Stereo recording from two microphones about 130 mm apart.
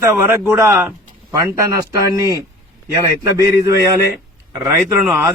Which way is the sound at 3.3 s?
25° right (ahead or behind).